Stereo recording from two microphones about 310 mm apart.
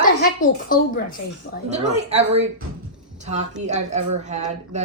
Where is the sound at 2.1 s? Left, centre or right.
Right.